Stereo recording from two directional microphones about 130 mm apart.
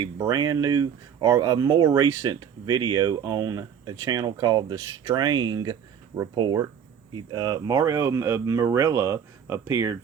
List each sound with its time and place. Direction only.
0.0 s speech: 30° right (ahead or behind)